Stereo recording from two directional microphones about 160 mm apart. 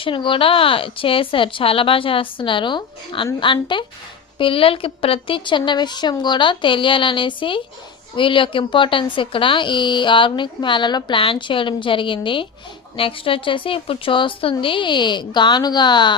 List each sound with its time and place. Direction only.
0.0 s speech: 30° left (ahead or behind)